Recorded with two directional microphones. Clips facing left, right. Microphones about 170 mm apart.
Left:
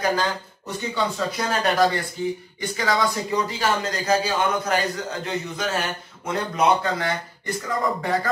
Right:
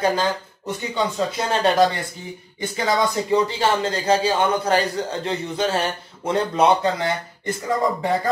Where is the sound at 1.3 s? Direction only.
25° right (ahead or behind).